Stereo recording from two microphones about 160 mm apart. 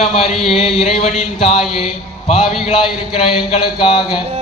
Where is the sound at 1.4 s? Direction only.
35° left (ahead or behind).